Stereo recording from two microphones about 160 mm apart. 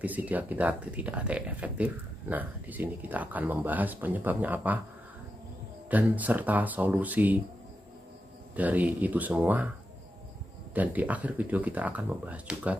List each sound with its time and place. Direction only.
0.0 s speech: 10° right (ahead or behind)
5.9 s speech: 10° right (ahead or behind)
8.5 s speech: 10° right (ahead or behind)
10.7 s speech: 10° right (ahead or behind)